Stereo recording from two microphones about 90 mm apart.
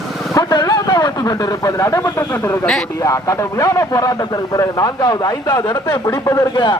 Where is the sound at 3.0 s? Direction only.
35° left (ahead or behind).